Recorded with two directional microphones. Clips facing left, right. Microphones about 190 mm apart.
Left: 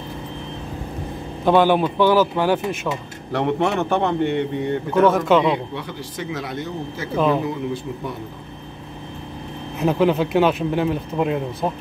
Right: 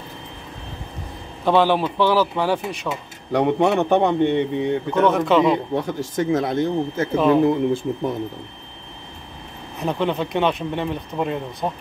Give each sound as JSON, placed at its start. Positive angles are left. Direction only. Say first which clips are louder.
{"t": 1.4, "sound": "speech", "louder": "left 2 dB", "side_deg": 0}
{"t": 3.3, "sound": "a man's voice", "louder": "right 3 dB", "side_deg": -15}
{"t": 4.9, "sound": "speech", "louder": "left 2 dB", "side_deg": 0}
{"t": 5.8, "sound": "speech", "louder": "right 7 dB", "side_deg": -45}
{"t": 7.2, "sound": "speech", "louder": "right 3 dB", "side_deg": 0}
{"t": 7.4, "sound": "speech", "louder": "right 7 dB", "side_deg": -50}
{"t": 9.8, "sound": "speech", "louder": "left 5 dB", "side_deg": 5}